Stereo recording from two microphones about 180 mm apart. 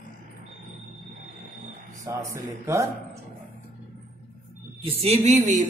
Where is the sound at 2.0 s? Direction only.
15° right (ahead or behind).